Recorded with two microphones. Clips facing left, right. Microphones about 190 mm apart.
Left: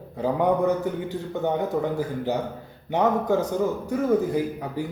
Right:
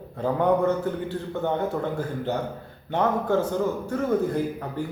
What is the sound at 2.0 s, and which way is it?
Speech, 10° left (ahead or behind).